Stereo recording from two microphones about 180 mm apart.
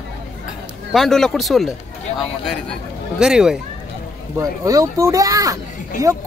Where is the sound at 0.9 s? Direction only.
Centre (ahead or behind).